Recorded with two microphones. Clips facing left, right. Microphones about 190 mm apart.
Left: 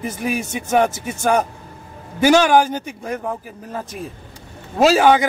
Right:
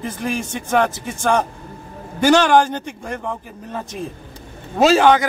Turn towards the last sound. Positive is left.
turn(degrees=5)  # may be behind; listen again after turning